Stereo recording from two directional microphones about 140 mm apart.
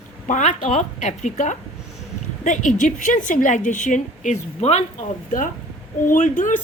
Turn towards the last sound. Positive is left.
turn(degrees=65)  # may be behind; listen again after turning